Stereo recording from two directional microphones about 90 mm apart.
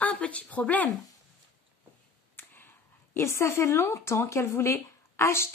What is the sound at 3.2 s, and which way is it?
Speech, 30° left (ahead or behind).